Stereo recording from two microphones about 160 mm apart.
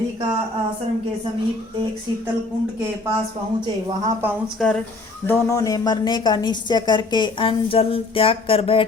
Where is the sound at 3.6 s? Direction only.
30° right (ahead or behind).